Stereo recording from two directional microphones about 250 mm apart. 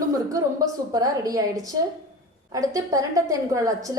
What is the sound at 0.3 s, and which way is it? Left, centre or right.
A woman's voice, centre.